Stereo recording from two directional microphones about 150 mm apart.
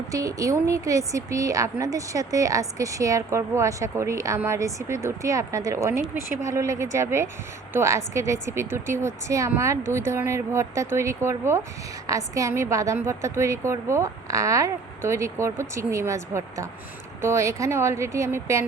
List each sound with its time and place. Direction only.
0.1 s a woman's voice: 25° right (ahead or behind)